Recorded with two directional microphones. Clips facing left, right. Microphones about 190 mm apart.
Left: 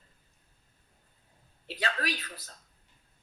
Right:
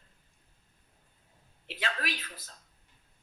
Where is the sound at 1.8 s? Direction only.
40° left (ahead or behind).